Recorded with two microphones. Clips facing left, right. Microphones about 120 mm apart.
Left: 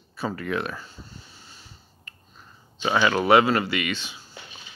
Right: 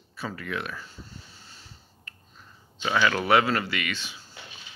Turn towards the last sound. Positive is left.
turn(degrees=25)  # may be behind; listen again after turning